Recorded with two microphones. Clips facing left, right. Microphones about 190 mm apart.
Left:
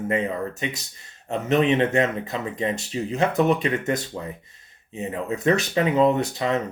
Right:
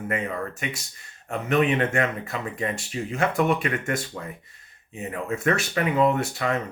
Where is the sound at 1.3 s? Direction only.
25° left (ahead or behind).